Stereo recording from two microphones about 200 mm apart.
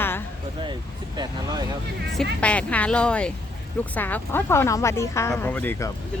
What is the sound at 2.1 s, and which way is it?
Speech, 5° left (ahead or behind).